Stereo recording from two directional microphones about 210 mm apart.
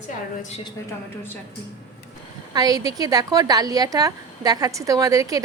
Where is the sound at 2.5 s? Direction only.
20° right (ahead or behind).